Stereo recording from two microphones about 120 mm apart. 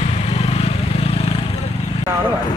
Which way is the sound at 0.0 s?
60° left (ahead or behind).